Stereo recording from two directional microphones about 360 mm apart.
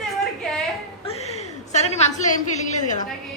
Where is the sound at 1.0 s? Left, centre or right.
Centre.